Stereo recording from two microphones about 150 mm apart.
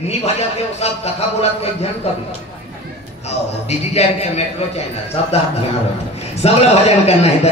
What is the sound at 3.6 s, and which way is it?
Speech, 45° left (ahead or behind).